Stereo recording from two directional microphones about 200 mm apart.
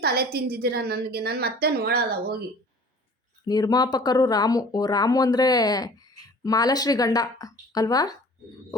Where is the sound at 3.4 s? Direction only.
20° left (ahead or behind).